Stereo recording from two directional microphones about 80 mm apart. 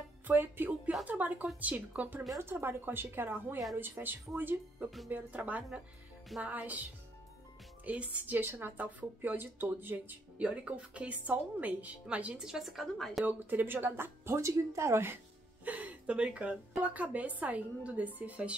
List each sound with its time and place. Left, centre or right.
0.3 s a woman's voice: right; by 13.2 s centre
13.2 s a woman's voice: right
15.6 s a woman's voice: centre